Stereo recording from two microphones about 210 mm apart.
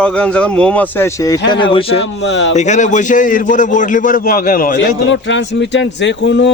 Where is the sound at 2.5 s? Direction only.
35° left (ahead or behind).